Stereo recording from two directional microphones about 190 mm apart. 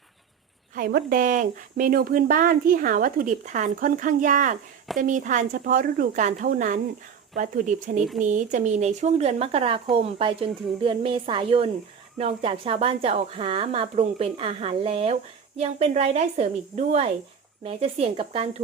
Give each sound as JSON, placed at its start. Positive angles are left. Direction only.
{"t": 0.8, "sound": "a woman's voice", "side_deg": -50}